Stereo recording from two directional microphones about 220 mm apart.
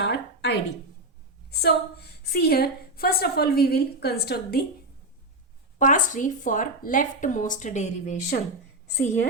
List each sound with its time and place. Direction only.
0.0 s a sound: 50° left (ahead or behind)
1.5 s a woman's voice: 45° left (ahead or behind)
5.8 s a woman's voice: 35° left (ahead or behind)